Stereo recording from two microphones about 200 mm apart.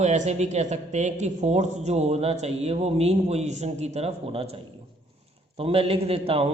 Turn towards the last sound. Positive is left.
turn(degrees=-30)  # may be behind; listen again after turning